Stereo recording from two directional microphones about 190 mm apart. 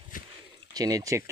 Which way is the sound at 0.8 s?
20° right (ahead or behind).